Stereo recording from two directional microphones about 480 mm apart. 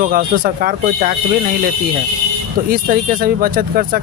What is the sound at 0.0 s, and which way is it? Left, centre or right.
Speech, centre.